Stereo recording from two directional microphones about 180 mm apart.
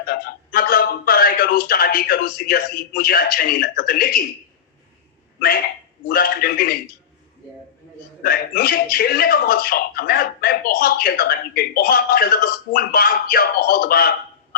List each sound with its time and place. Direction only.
0.0 s a man's voice: 55° left (ahead or behind)
6.1 s speech: 55° left (ahead or behind)
8.2 s speech: 55° left (ahead or behind)